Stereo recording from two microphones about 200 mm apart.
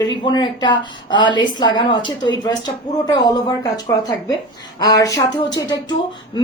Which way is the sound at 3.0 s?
20° left (ahead or behind).